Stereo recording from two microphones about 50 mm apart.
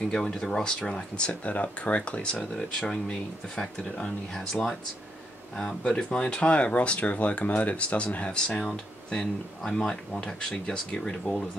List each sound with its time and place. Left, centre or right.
0.4 s speech: centre
1.4 s speech: left
2.5 s speech: centre
2.9 s speech: centre
5.6 s speech: centre
8.6 s speech: centre